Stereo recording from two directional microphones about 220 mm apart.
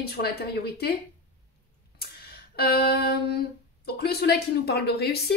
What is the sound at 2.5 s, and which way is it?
A woman's voice, 45° left (ahead or behind).